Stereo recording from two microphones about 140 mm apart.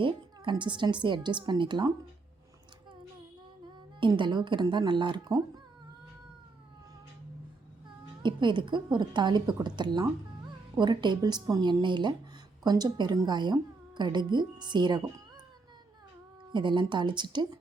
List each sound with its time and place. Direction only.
0.0 s speech: 35° right (ahead or behind)
4.0 s speech: 35° right (ahead or behind)
8.2 s speech: 35° right (ahead or behind)
16.5 s speech: 35° right (ahead or behind)